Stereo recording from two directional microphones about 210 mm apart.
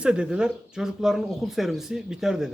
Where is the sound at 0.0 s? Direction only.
5° right (ahead or behind).